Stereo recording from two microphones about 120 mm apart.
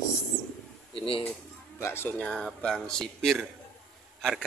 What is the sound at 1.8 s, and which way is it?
Speech, 20° left (ahead or behind).